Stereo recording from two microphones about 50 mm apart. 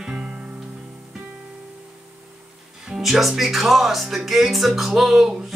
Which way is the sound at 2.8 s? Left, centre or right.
Centre.